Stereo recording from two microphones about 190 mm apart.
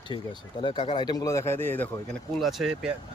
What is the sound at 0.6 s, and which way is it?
Speech, 25° left (ahead or behind).